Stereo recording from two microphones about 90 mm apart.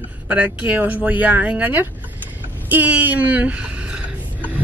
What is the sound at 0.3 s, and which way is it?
Speech, 20° right (ahead or behind).